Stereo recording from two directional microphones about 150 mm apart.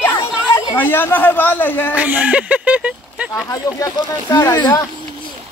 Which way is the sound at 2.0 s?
10° right (ahead or behind).